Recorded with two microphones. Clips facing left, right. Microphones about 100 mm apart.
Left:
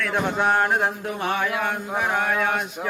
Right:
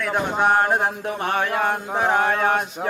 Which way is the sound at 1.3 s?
45° right (ahead or behind).